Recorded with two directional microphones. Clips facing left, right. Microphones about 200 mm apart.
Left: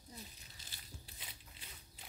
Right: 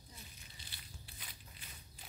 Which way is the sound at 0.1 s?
40° left (ahead or behind).